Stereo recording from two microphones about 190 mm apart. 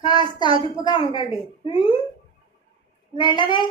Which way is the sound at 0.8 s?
25° left (ahead or behind).